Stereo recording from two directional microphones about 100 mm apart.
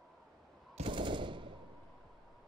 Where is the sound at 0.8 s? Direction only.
55° right (ahead or behind).